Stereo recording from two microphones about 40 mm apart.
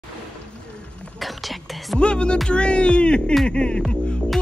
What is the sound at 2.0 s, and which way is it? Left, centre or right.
Speech, left.